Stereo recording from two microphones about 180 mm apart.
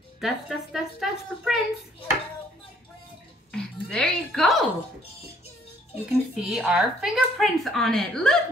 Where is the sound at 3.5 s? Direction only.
5° left (ahead or behind).